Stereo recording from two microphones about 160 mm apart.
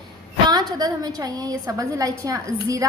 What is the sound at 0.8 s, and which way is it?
A woman's voice, 25° right (ahead or behind).